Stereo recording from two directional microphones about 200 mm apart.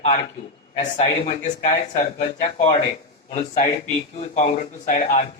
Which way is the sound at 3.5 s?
35° left (ahead or behind).